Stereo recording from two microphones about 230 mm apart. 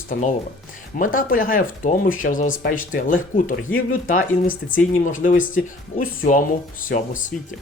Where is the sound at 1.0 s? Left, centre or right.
Left.